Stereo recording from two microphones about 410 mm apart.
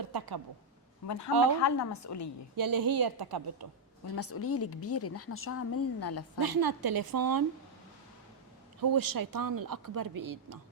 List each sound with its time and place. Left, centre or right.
0.0 s a sound: right
1.0 s speech: left
2.6 s a woman's voice: right
4.1 s speech: left
6.4 s a woman's voice: right
8.8 s speech: right